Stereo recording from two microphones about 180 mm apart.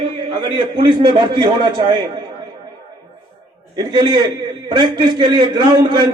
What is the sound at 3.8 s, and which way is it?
A man's voice, 25° right (ahead or behind).